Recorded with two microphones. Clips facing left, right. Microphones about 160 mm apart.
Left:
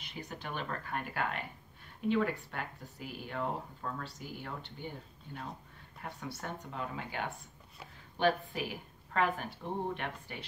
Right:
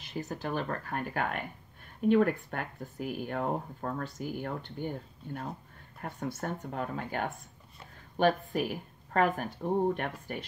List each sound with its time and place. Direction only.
0.1 s speech: 40° right (ahead or behind)
8.5 s speech: 45° right (ahead or behind)